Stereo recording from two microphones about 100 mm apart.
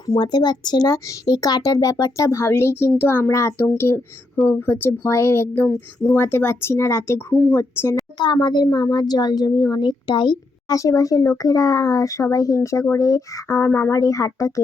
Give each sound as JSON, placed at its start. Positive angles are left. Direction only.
{"t": 0.0, "sound": "speech", "side_deg": 45}
{"t": 8.2, "sound": "a woman's voice", "side_deg": 50}
{"t": 10.8, "sound": "speech", "side_deg": 35}